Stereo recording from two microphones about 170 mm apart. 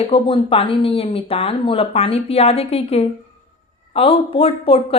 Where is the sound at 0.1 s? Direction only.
30° left (ahead or behind).